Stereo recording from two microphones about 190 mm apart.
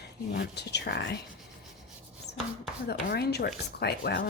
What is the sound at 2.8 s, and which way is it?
A woman's voice, 60° left (ahead or behind).